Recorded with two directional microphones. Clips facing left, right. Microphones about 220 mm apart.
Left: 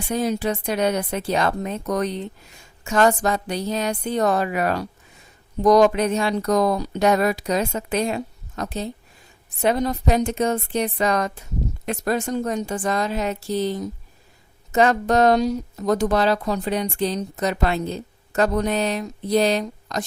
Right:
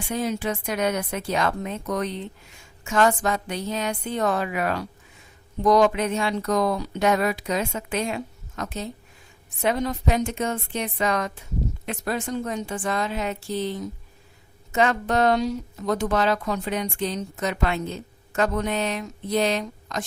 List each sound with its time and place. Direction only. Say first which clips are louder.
0.1 s speech: left 4 dB; 40° left (ahead or behind)